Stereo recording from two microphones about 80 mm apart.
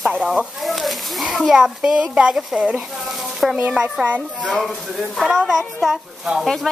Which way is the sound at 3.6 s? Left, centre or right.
Centre.